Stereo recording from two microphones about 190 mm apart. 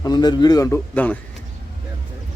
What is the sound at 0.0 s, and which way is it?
A man's voice, 20° left (ahead or behind).